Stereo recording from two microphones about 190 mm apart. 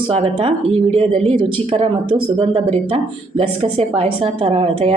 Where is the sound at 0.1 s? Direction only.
30° right (ahead or behind).